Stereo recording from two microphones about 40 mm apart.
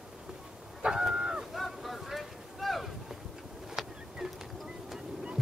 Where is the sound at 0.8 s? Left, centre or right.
Centre.